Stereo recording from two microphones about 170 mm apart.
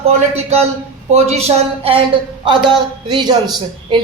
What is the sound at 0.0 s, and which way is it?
A man's voice, 40° right (ahead or behind).